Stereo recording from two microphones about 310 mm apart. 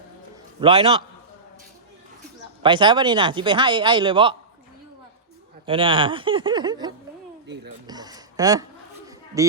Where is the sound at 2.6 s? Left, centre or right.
Centre.